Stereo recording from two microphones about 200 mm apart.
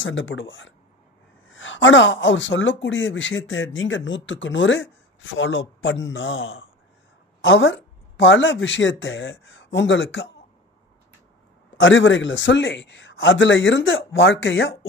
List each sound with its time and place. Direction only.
0.0 s speech: 70° left (ahead or behind)
11.7 s speech: 70° left (ahead or behind)